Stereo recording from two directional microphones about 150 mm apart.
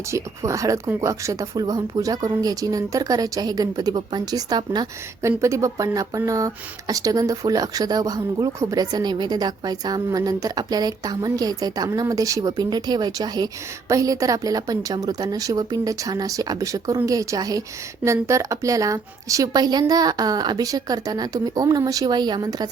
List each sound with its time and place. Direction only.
0.1 s speech: 20° right (ahead or behind)